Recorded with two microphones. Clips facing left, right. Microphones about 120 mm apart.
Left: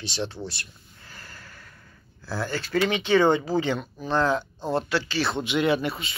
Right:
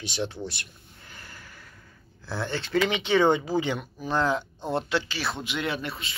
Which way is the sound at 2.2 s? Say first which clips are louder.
Left 1 dB; 20° right (ahead or behind).